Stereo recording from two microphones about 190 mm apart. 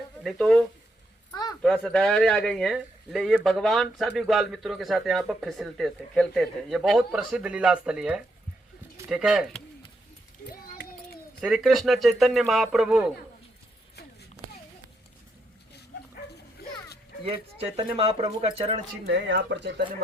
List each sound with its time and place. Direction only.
0.2 s speech: centre (ahead or behind)
1.3 s a sound: 20° left (ahead or behind)
1.6 s speech: 5° left (ahead or behind)
10.4 s a sound: 50° left (ahead or behind)
11.3 s speech: 5° right (ahead or behind)
17.2 s speech: 30° right (ahead or behind)
19.0 s speech: 60° right (ahead or behind)